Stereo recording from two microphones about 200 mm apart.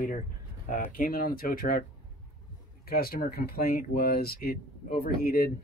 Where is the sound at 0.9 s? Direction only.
45° left (ahead or behind).